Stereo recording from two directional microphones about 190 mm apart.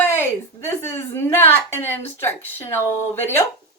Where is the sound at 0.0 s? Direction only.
10° left (ahead or behind).